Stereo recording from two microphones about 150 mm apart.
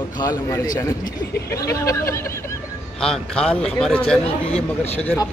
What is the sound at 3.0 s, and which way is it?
Speech, 5° left (ahead or behind).